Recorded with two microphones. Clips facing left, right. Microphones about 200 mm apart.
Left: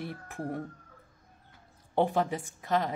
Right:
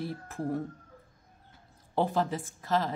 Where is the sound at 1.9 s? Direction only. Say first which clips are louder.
Left 1 dB; 15° left (ahead or behind).